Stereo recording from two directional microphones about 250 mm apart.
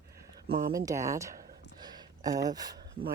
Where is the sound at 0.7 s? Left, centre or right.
Centre.